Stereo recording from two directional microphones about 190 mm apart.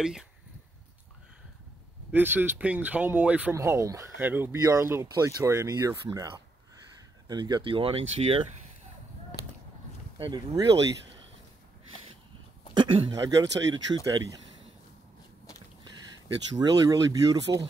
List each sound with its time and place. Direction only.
0.0 s speech: 5° right (ahead or behind)
2.1 s speech: 10° right (ahead or behind); by 8.5 s 30° right (ahead or behind)
10.1 s speech: 25° right (ahead or behind)
12.7 s speech: 25° right (ahead or behind)
16.5 s speech: 20° right (ahead or behind)